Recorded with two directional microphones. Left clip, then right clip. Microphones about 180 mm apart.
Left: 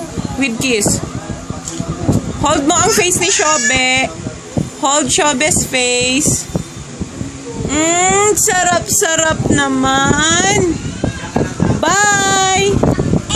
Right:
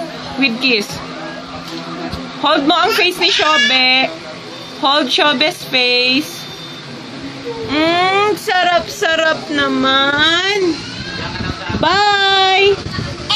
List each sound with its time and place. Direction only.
0.4 s speech: 25° left (ahead or behind)
2.4 s speech: 20° left (ahead or behind)
7.7 s speech: 20° left (ahead or behind)
8.5 s a sound: 40° left (ahead or behind)
11.8 s speech: 15° left (ahead or behind)